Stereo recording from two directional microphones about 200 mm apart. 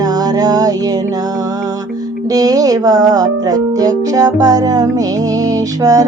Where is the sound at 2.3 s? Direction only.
20° right (ahead or behind).